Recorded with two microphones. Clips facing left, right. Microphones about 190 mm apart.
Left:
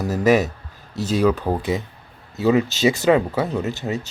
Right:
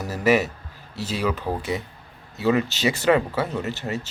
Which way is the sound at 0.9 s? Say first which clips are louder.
Left 7 dB; 40° left (ahead or behind).